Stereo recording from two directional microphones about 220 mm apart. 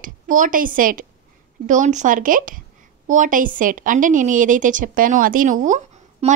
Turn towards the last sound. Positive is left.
turn(degrees=-30)  # may be behind; listen again after turning